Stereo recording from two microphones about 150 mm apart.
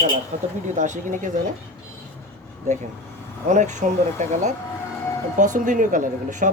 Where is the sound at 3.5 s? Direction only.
55° right (ahead or behind).